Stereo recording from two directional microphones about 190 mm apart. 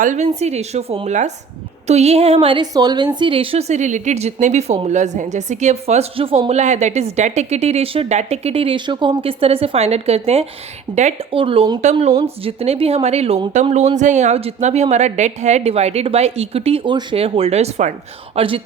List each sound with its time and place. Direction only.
0.0 s a woman's voice: 40° right (ahead or behind)